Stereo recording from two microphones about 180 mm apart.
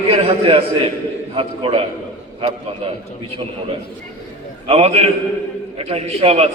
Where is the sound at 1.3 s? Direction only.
30° right (ahead or behind).